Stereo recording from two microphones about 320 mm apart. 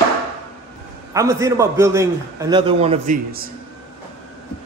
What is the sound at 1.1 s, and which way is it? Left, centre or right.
A man's voice, centre.